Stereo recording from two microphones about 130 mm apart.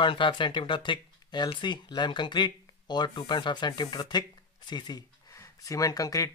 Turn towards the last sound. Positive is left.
turn(degrees=25)  # may be behind; listen again after turning